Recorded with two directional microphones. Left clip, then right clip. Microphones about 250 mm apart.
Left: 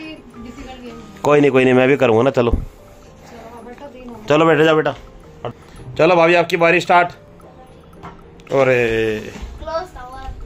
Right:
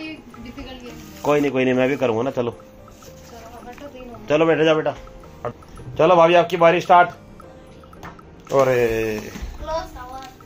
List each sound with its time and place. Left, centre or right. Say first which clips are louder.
1.2 s a man's voice: left 6 dB; left
4.3 s a man's voice: left 4 dB; left
8.5 s speech: left 2 dB; centre